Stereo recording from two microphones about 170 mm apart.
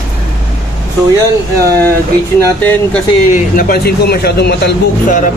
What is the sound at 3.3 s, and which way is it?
Speech, 55° left (ahead or behind).